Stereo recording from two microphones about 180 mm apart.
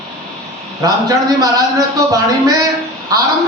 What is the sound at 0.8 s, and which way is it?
A man's voice, 20° right (ahead or behind).